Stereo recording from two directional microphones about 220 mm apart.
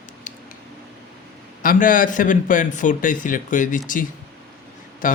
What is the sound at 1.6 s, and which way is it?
A man's voice, 40° left (ahead or behind).